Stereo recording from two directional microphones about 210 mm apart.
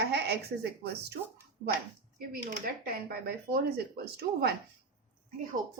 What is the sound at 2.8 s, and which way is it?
A woman's voice, 45° right (ahead or behind).